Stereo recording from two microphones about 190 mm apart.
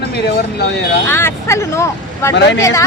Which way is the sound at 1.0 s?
10° left (ahead or behind).